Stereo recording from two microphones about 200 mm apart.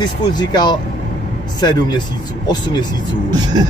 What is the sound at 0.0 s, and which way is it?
Speech, 20° left (ahead or behind).